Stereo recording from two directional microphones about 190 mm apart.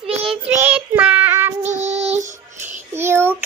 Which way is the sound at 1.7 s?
35° right (ahead or behind).